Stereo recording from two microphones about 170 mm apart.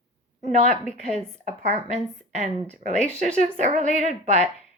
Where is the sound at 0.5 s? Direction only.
45° right (ahead or behind).